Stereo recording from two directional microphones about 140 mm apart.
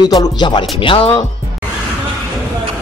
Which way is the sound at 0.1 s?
30° left (ahead or behind).